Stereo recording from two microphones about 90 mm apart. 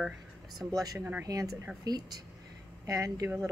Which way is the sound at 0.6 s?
40° right (ahead or behind).